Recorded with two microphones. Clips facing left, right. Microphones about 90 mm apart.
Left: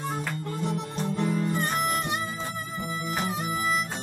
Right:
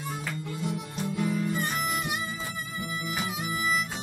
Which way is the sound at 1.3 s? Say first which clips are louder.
Left 2 dB; 45° left (ahead or behind).